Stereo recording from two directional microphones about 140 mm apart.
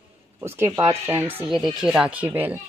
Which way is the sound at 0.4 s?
20° right (ahead or behind).